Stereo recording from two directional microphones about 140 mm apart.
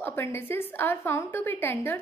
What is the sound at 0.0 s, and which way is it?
A woman's voice, 15° left (ahead or behind).